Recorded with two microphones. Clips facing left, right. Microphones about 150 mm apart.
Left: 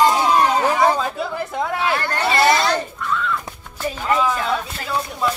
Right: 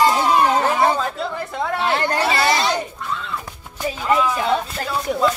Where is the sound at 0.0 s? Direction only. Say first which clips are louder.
Even; 5° right (ahead or behind).